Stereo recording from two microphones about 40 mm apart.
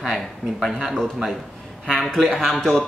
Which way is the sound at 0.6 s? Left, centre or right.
Centre.